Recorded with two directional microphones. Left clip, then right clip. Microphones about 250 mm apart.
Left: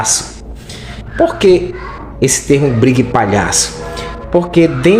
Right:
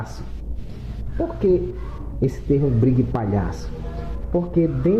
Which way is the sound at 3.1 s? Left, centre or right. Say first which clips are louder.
Left 14 dB; centre.